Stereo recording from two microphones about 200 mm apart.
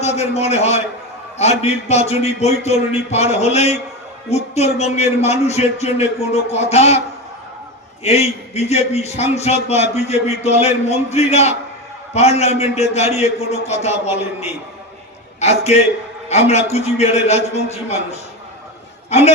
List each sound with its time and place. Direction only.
0.2 s a man's voice: 30° left (ahead or behind)
8.0 s a man's voice: 30° left (ahead or behind)
15.4 s a man's voice: 35° left (ahead or behind)